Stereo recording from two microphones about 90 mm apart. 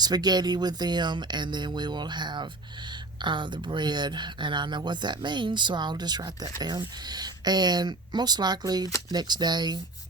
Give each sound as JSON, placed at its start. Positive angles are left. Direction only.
{"t": 0.0, "sound": "speech", "side_deg": -50}